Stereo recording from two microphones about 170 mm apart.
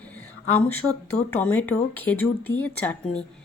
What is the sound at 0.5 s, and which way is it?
Speech, 10° left (ahead or behind).